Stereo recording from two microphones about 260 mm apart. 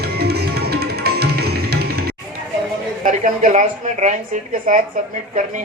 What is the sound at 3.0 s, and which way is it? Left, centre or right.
A woman's voice, right.